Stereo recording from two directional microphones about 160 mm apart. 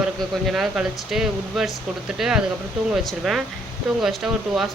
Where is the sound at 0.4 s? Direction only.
5° right (ahead or behind).